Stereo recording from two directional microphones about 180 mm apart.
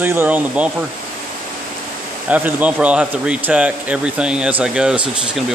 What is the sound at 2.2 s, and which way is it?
Speech, 10° right (ahead or behind).